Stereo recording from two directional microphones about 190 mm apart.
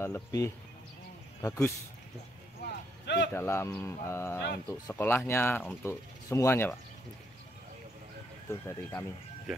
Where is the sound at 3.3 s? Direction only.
15° left (ahead or behind).